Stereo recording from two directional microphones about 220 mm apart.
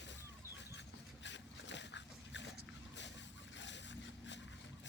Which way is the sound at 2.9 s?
55° left (ahead or behind).